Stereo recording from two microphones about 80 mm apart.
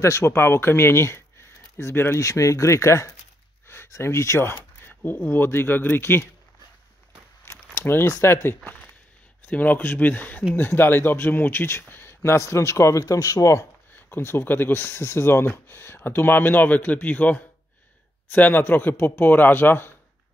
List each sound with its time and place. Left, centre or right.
0.0 s speech: left
7.4 s speech: left
9.5 s speech: left
13.9 s speech: left